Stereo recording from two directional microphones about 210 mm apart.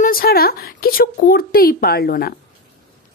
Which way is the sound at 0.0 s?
45° left (ahead or behind).